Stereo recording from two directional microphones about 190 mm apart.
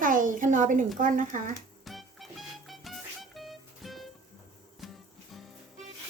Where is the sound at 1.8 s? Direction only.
Centre (ahead or behind).